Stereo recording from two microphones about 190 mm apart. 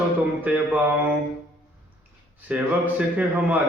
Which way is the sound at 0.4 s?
10° right (ahead or behind).